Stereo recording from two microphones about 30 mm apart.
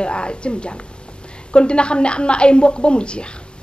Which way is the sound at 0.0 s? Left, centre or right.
Left.